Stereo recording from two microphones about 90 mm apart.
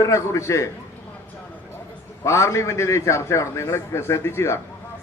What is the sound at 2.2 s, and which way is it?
A man's voice, 35° left (ahead or behind).